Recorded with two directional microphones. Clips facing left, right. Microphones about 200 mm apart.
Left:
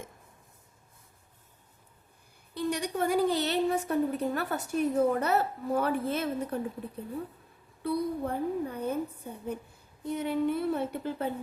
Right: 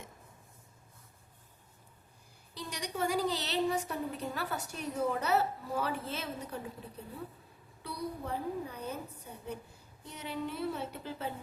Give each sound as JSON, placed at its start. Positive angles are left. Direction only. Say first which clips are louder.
{"t": 2.6, "sound": "a woman's voice", "louder": "left 7 dB", "side_deg": 55}
{"t": 7.8, "sound": "a woman's voice", "louder": "left 9 dB", "side_deg": 55}